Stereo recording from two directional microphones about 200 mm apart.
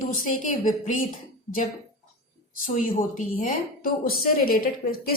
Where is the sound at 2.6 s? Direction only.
40° left (ahead or behind).